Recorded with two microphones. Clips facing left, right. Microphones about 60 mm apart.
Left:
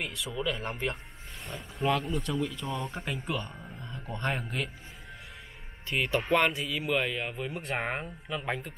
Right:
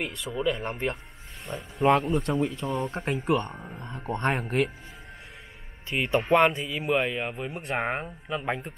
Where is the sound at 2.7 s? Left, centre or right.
Right.